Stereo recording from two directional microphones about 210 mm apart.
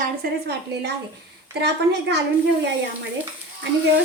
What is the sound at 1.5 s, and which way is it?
Speech, 55° right (ahead or behind).